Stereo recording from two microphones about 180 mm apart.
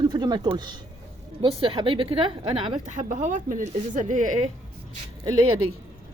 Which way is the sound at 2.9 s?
45° right (ahead or behind).